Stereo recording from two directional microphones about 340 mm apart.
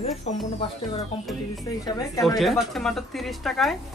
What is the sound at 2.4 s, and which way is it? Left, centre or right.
A man's voice, centre.